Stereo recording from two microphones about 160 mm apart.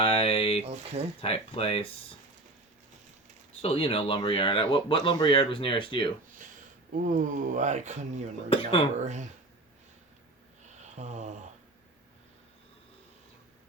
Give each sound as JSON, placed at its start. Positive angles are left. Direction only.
{"t": 0.0, "sound": "a sound", "side_deg": 35}
{"t": 0.6, "sound": "speech", "side_deg": -45}
{"t": 1.2, "sound": "speech", "side_deg": 40}
{"t": 3.6, "sound": "speech", "side_deg": 35}
{"t": 6.9, "sound": "speech", "side_deg": -55}
{"t": 8.4, "sound": "speech", "side_deg": 35}
{"t": 10.8, "sound": "speech", "side_deg": -45}